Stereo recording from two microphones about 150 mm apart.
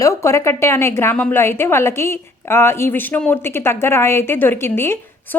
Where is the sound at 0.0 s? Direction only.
20° left (ahead or behind).